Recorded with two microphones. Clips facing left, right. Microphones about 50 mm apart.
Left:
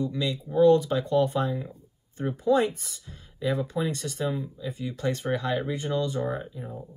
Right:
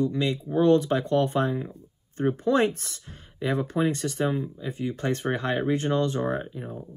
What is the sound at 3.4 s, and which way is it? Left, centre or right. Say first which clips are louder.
Speech: right 2 dB; right.